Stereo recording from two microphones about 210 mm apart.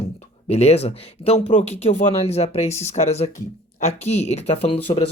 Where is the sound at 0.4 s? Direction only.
30° left (ahead or behind).